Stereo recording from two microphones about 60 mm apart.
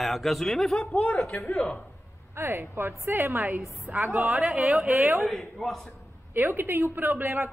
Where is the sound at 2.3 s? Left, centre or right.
Right.